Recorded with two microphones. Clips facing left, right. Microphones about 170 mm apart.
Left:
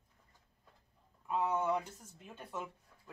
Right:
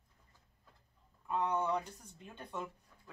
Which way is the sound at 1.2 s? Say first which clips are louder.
Left 1 dB; 5° left (ahead or behind).